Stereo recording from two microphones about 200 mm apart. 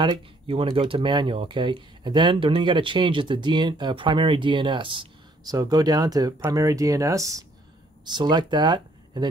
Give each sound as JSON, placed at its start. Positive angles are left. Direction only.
{"t": 0.0, "sound": "speech", "side_deg": -30}